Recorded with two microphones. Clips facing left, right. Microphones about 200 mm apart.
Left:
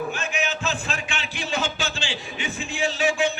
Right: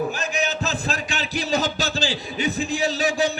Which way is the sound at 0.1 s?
40° right (ahead or behind).